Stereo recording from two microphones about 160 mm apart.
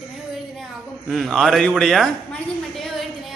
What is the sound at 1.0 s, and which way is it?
A woman's voice, centre (ahead or behind).